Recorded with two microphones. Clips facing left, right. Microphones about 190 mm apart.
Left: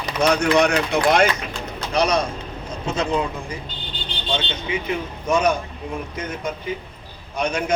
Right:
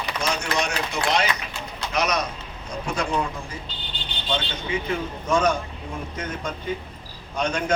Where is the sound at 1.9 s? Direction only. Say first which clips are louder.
Left 5 dB; 30° left (ahead or behind).